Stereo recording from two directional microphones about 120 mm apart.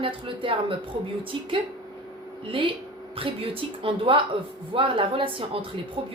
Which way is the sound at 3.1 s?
50° right (ahead or behind).